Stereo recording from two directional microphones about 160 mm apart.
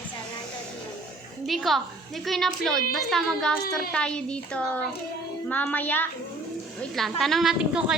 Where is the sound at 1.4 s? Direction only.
Centre (ahead or behind).